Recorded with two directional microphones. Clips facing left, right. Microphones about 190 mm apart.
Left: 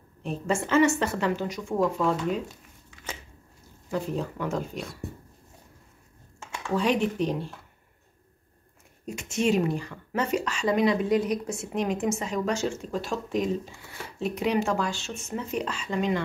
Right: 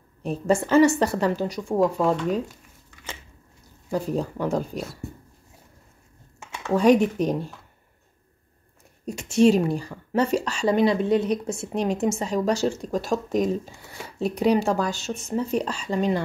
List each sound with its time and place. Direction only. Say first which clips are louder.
0.2 s a woman's voice: right 5 dB; 40° right (ahead or behind)
3.9 s a woman's voice: right 4 dB; 35° right (ahead or behind)
4.7 s speech: right 3 dB; centre (ahead or behind)
6.7 s speech: right 7 dB; 45° right (ahead or behind)
9.0 s a woman's voice: right 8 dB; 35° right (ahead or behind)